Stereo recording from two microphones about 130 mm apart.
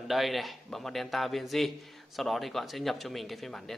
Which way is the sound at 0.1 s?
Centre (ahead or behind).